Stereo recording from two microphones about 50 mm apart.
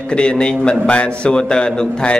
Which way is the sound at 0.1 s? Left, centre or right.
Centre.